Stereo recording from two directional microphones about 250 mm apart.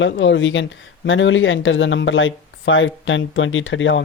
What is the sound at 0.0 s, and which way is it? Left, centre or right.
Speech, left.